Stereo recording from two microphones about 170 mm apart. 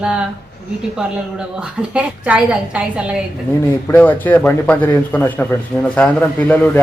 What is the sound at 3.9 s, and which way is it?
A man's voice, 10° left (ahead or behind).